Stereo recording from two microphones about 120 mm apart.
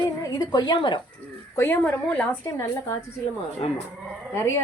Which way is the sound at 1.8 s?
10° left (ahead or behind).